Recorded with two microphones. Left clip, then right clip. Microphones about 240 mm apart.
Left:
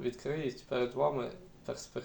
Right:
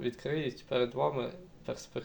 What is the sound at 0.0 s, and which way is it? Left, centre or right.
Speech, right.